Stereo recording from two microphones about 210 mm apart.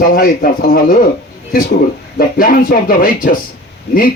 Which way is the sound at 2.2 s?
40° left (ahead or behind).